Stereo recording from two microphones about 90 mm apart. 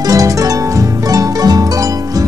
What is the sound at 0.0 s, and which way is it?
Music, 40° right (ahead or behind).